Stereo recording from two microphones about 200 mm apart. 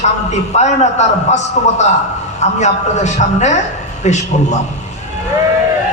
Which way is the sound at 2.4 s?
35° left (ahead or behind).